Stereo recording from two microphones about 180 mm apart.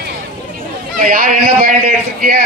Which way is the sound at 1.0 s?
50° right (ahead or behind).